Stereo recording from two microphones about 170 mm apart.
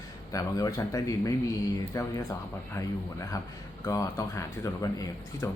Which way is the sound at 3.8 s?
15° left (ahead or behind).